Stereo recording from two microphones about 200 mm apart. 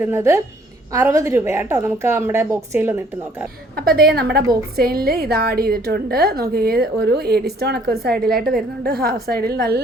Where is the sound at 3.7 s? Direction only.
50° right (ahead or behind).